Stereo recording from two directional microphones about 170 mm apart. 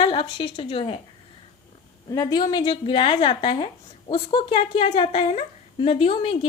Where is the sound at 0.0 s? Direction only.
30° left (ahead or behind).